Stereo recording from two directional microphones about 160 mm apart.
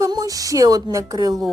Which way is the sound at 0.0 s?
20° right (ahead or behind).